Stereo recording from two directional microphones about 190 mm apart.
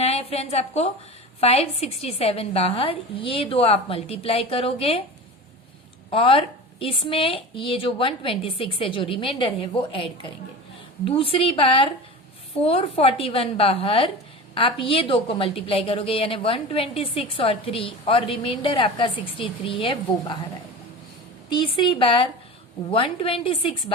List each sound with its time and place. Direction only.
0.0 s a woman's voice: 35° left (ahead or behind)
6.1 s a woman's voice: 30° left (ahead or behind)
21.5 s a woman's voice: 25° left (ahead or behind)